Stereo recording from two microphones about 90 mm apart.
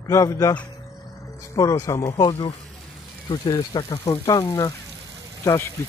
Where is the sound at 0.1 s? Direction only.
35° left (ahead or behind).